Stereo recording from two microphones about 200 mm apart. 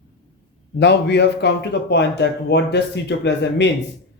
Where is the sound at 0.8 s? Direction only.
60° left (ahead or behind).